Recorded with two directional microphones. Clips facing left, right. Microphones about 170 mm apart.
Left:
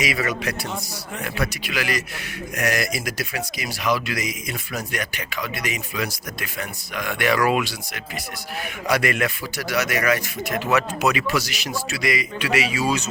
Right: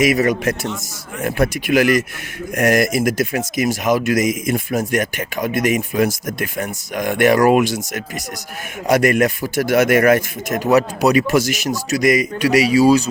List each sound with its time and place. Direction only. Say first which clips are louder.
0.0 s speech: right 9 dB; 45° right (ahead or behind)